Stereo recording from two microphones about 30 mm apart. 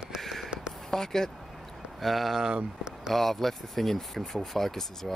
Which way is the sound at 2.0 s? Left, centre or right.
Centre.